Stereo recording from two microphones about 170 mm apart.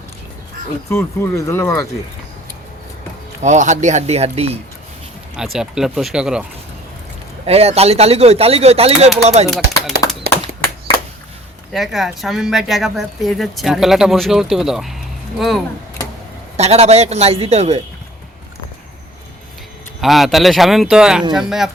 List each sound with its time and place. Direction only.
0.9 s speech: 15° left (ahead or behind)
3.4 s speech: 45° right (ahead or behind)
5.4 s speech: 5° right (ahead or behind)
7.4 s speech: 35° right (ahead or behind)
10.3 s a sound: 65° right (ahead or behind)
11.7 s speech: centre (ahead or behind)
16.6 s speech: 40° right (ahead or behind)
20.0 s speech: centre (ahead or behind)